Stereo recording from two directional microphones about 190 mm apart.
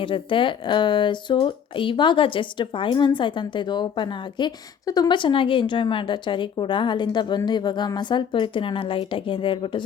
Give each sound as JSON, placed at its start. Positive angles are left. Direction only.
{"t": 0.0, "sound": "speech", "side_deg": 25}